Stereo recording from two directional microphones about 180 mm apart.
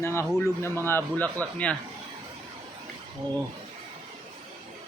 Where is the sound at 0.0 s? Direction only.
15° left (ahead or behind).